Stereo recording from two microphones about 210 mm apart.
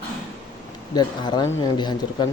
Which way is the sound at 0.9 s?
20° left (ahead or behind).